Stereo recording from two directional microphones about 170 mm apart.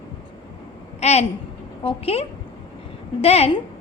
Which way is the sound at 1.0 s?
40° left (ahead or behind).